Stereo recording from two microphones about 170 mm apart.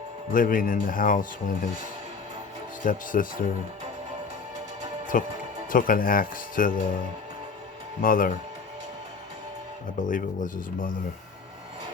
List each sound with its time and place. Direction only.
0.3 s speech: 55° left (ahead or behind)
2.8 s speech: 55° left (ahead or behind)
5.1 s speech: 55° left (ahead or behind)
8.0 s speech: 55° left (ahead or behind)
10.0 s speech: 50° left (ahead or behind)